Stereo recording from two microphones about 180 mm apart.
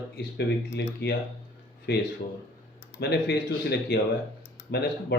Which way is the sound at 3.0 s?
65° left (ahead or behind).